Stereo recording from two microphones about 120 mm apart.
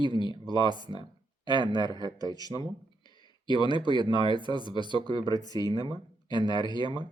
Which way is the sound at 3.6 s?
40° left (ahead or behind).